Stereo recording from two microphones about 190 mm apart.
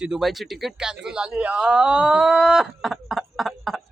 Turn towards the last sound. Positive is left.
turn(degrees=0)  # may be behind; listen again after turning